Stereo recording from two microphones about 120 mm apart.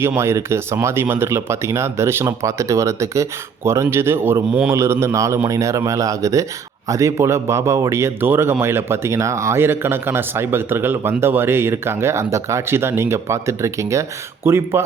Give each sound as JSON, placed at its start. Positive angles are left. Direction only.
{"t": 0.2, "sound": "a man's voice", "side_deg": -20}